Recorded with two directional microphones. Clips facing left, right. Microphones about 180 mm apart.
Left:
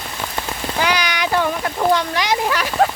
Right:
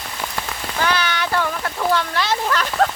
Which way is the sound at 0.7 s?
15° left (ahead or behind).